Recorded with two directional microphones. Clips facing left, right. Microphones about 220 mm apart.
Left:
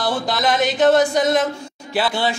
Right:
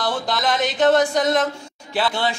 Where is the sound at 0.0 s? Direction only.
5° left (ahead or behind).